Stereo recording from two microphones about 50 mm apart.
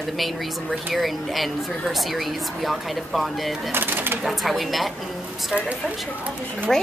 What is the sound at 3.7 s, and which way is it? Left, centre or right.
Bird, right.